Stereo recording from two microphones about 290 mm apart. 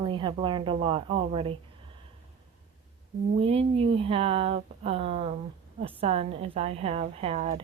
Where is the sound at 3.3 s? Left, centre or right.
Centre.